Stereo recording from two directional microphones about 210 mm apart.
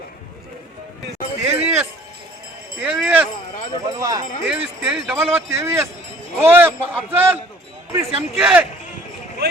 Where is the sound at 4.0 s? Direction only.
20° right (ahead or behind).